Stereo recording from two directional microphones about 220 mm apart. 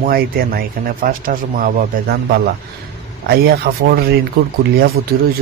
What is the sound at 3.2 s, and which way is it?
A man's voice, 45° right (ahead or behind).